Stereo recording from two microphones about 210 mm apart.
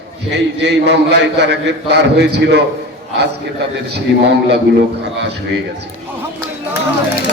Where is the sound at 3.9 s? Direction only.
50° right (ahead or behind).